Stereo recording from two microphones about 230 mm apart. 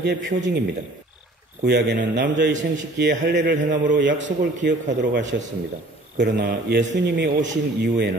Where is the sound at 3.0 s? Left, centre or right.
Right.